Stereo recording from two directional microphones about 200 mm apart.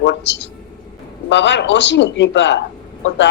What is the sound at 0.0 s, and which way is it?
Speech, 60° left (ahead or behind).